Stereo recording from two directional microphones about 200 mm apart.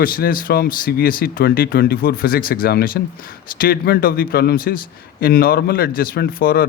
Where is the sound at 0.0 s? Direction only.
45° left (ahead or behind).